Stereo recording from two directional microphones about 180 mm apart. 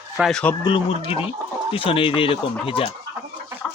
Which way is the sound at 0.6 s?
30° left (ahead or behind).